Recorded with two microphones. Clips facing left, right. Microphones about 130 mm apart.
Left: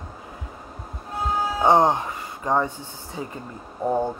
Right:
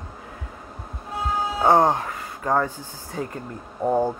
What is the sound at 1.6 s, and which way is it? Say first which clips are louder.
Speech: even; 20° left (ahead or behind).